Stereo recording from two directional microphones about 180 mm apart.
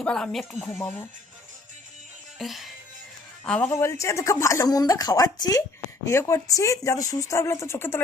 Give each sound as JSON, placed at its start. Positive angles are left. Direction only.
{"t": 0.0, "sound": "speech", "side_deg": 5}
{"t": 2.4, "sound": "a man's voice", "side_deg": 0}
{"t": 3.7, "sound": "speech", "side_deg": 15}